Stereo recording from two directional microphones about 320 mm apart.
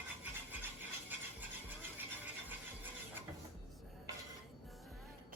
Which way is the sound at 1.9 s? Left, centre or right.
Centre.